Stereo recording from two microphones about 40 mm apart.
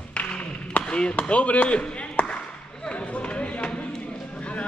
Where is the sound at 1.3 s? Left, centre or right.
Left.